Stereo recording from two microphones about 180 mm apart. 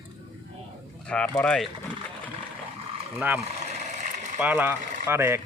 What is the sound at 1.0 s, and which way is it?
Speech, 5° left (ahead or behind).